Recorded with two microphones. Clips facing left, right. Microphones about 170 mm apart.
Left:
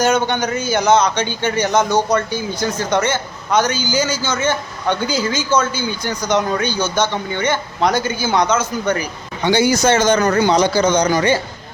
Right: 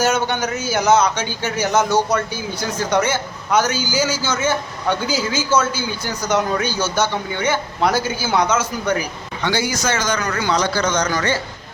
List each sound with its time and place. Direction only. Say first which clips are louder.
0.0 s a man's voice: left 2 dB; 5° right (ahead or behind)
9.4 s speech: left 7 dB; 20° left (ahead or behind)
10.2 s speech: left 8 dB; 45° left (ahead or behind)
10.4 s speech: left 5 dB; 20° left (ahead or behind)